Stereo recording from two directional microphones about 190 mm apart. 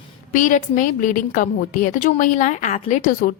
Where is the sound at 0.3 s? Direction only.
40° left (ahead or behind).